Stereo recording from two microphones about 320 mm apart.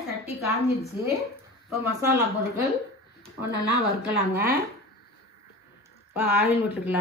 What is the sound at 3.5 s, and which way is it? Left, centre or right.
Speech, left.